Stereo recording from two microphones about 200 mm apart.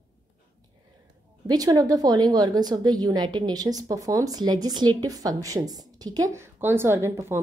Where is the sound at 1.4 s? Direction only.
20° right (ahead or behind).